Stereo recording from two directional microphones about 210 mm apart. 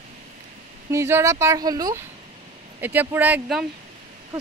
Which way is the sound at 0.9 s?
15° right (ahead or behind).